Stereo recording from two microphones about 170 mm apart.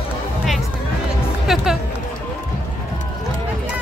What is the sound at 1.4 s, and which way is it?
Music, centre (ahead or behind).